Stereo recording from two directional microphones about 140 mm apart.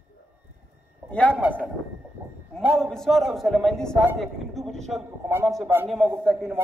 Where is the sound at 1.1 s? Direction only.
10° left (ahead or behind).